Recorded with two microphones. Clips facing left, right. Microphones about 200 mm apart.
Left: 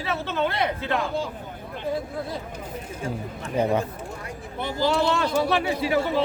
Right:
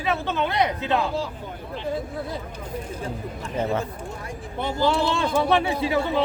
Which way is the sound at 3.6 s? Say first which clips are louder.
Left 3 dB; 15° left (ahead or behind).